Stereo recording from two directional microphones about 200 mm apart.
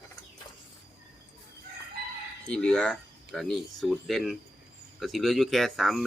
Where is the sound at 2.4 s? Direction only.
5° left (ahead or behind).